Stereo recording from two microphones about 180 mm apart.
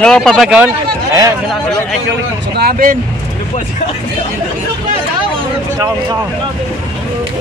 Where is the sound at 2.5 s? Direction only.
55° right (ahead or behind).